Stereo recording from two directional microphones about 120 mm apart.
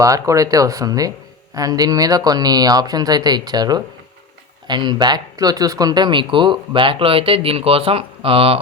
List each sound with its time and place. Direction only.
0.0 s speech: 30° right (ahead or behind); by 8.5 s 50° right (ahead or behind)